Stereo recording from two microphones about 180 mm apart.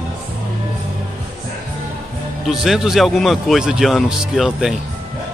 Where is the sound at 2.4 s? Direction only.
Centre (ahead or behind).